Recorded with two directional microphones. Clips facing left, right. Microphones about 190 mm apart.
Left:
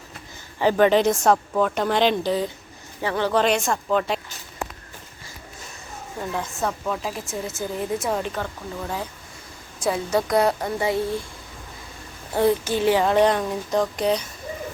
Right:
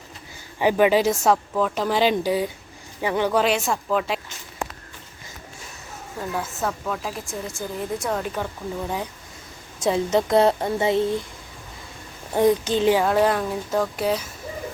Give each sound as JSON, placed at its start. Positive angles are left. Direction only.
{"t": 0.6, "sound": "speech", "side_deg": -10}
{"t": 6.3, "sound": "speech", "side_deg": -5}
{"t": 8.3, "sound": "speech", "side_deg": -10}
{"t": 12.3, "sound": "speech", "side_deg": -15}
{"t": 13.0, "sound": "speech", "side_deg": -5}